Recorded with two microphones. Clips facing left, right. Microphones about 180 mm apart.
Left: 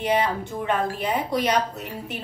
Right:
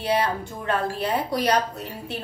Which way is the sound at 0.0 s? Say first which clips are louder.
Left 1 dB; 15° left (ahead or behind).